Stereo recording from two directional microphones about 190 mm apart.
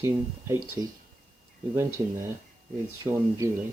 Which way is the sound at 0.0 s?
15° right (ahead or behind).